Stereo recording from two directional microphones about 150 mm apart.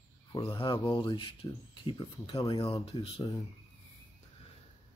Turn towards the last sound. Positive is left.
turn(degrees=40)  # may be behind; listen again after turning